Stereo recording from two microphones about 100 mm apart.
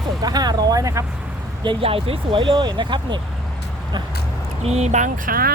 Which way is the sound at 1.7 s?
70° right (ahead or behind).